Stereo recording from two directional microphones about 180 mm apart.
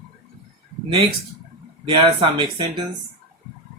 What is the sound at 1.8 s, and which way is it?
Speech, 30° right (ahead or behind).